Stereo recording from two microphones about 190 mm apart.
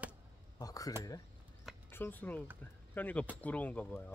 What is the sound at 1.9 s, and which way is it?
Speech, 10° left (ahead or behind).